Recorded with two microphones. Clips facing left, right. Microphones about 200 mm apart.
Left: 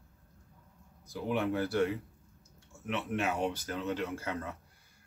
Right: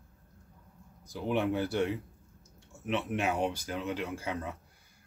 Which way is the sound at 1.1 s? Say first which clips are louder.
Right 2 dB; 20° right (ahead or behind).